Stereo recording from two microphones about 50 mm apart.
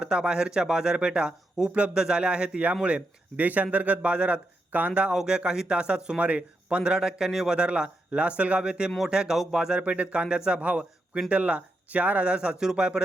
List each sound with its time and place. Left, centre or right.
0.0 s a man's voice: centre
6.1 s a man's voice: right